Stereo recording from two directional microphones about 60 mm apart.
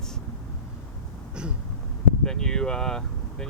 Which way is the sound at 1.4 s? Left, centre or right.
Centre.